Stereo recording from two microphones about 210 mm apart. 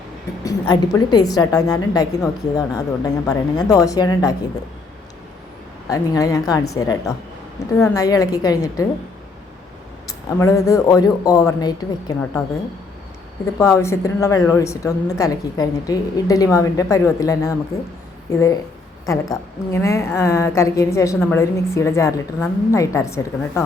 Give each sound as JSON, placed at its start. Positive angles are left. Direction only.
{"t": 0.7, "sound": "a woman's voice", "side_deg": 20}
{"t": 5.9, "sound": "a woman's voice", "side_deg": 15}
{"t": 10.1, "sound": "a woman's voice", "side_deg": 15}
{"t": 13.4, "sound": "a woman's voice", "side_deg": 15}